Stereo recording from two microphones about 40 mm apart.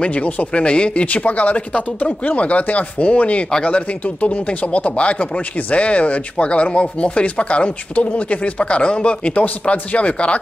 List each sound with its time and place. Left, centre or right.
0.0 s speech: left
1.1 s speech: left